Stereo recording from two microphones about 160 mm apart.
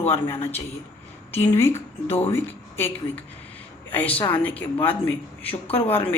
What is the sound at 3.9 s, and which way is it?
Speech, 10° left (ahead or behind).